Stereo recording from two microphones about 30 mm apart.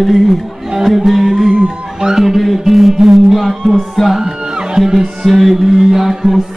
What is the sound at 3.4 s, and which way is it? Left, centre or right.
Music, centre.